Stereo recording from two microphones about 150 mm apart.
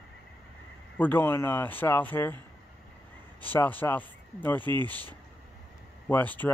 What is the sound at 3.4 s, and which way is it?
Speech, 10° left (ahead or behind).